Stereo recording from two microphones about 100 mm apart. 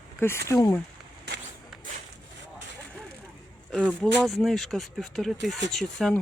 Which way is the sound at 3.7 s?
5° left (ahead or behind).